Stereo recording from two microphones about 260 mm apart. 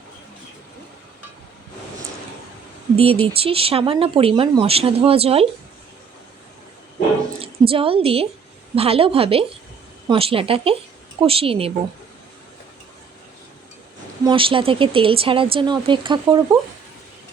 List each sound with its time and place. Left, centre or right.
3.0 s speech: right
7.4 s a woman's voice: right
14.3 s speech: centre